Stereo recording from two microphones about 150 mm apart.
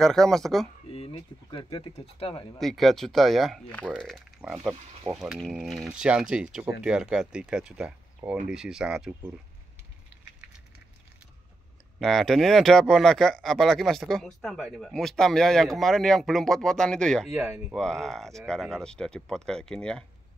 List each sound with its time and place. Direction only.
0.0 s speech: 5° left (ahead or behind)
0.9 s speech: 35° left (ahead or behind)
2.6 s speech: centre (ahead or behind)
12.0 s speech: centre (ahead or behind)
17.4 s speech: 15° right (ahead or behind)
17.7 s speech: 5° left (ahead or behind)